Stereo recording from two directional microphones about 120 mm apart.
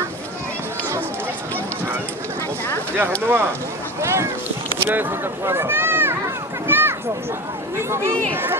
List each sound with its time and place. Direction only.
3.2 s speech: 20° right (ahead or behind)
4.8 s a sound: 20° right (ahead or behind)
7.7 s speech: 20° right (ahead or behind)